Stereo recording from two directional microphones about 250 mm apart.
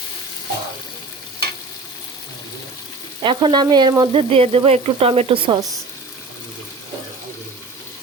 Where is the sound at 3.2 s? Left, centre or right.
Centre.